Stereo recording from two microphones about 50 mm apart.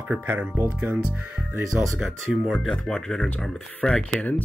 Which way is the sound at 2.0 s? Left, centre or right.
Centre.